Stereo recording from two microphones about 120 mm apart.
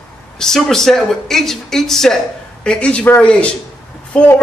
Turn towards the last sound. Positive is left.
turn(degrees=10)  # may be behind; listen again after turning